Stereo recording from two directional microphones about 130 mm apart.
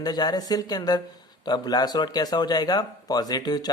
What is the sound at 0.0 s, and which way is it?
Speech, 30° left (ahead or behind).